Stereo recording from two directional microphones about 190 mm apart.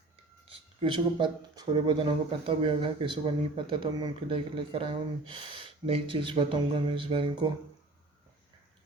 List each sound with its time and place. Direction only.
0.8 s speech: 25° right (ahead or behind)